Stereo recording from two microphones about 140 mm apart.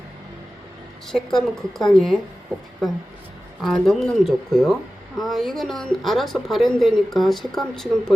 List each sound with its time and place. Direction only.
1.1 s speech: centre (ahead or behind)